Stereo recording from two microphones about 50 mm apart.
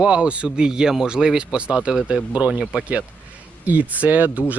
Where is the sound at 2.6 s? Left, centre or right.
Centre.